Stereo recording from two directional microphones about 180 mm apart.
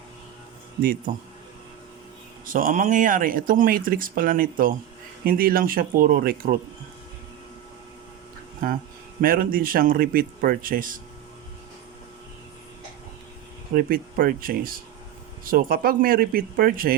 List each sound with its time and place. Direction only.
0.8 s speech: 55° right (ahead or behind)
2.5 s speech: 50° right (ahead or behind)
8.6 s speech: 55° right (ahead or behind)
13.7 s speech: 55° right (ahead or behind)